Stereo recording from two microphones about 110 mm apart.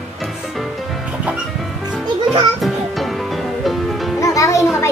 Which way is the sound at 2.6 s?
Centre (ahead or behind).